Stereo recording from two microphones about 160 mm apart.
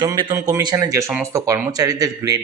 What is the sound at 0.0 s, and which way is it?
Speech, 25° right (ahead or behind).